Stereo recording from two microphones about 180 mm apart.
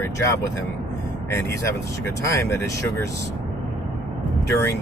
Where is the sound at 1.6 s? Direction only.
15° left (ahead or behind).